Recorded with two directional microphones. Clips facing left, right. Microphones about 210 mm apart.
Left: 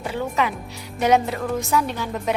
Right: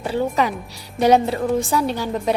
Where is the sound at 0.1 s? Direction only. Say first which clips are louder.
Right 4 dB; 35° right (ahead or behind).